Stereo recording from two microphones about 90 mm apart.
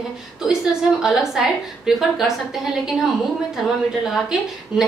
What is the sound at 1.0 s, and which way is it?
A woman's voice, 5° right (ahead or behind).